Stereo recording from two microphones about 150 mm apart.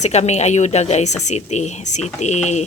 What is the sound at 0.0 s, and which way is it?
Speech, 45° left (ahead or behind).